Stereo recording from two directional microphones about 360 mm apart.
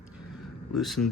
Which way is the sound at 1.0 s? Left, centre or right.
Left.